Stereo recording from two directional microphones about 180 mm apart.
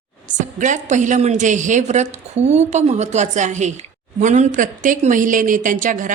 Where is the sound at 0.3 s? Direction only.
45° right (ahead or behind).